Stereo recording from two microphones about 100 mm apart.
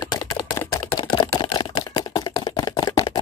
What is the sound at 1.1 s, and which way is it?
Camera, 50° left (ahead or behind).